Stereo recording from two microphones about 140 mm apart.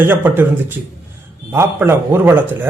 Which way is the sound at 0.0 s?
15° right (ahead or behind).